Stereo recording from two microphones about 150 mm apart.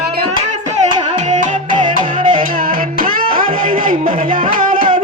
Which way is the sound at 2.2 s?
65° right (ahead or behind).